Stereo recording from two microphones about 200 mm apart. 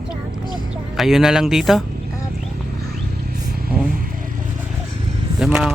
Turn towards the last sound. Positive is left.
turn(degrees=-5)  # may be behind; listen again after turning